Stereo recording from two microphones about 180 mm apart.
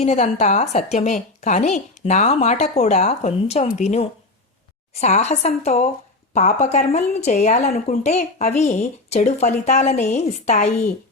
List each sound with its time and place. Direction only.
0.0 s a woman's voice: 40° left (ahead or behind)